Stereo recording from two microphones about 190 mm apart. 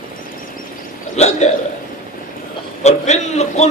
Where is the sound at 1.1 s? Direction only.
35° left (ahead or behind).